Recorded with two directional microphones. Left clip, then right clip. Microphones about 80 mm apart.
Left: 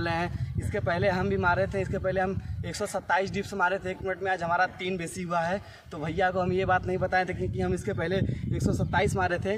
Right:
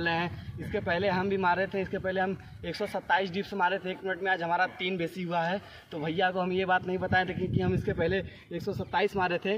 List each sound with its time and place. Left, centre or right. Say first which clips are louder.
0.0 s speech: even; left
0.7 s a man's voice: left 2 dB; left
7.5 s speech: right 1 dB; left
7.9 s speech: even; left